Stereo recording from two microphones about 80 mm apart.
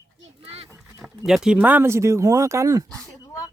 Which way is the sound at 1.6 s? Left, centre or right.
Right.